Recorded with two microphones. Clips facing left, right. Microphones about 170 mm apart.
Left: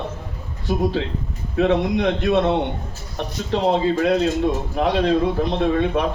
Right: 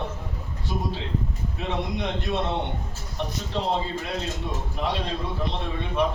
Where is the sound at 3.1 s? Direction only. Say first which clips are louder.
Left 6 dB; 85° left.